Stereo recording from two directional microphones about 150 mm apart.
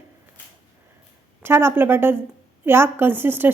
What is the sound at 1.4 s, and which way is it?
Speech, 15° right (ahead or behind).